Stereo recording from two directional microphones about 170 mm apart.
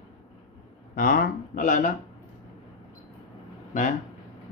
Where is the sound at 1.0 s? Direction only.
55° left (ahead or behind).